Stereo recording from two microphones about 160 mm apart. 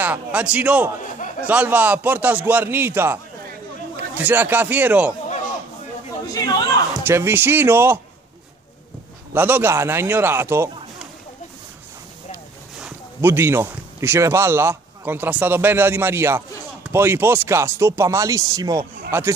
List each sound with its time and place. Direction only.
0.0 s a man's voice: 10° right (ahead or behind)
6.3 s speech: 25° left (ahead or behind)
6.9 s speech: 15° right (ahead or behind)
9.3 s speech: 10° right (ahead or behind)
12.8 s speech: 15° right (ahead or behind)